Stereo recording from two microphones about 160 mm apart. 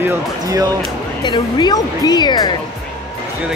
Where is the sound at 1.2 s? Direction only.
25° left (ahead or behind).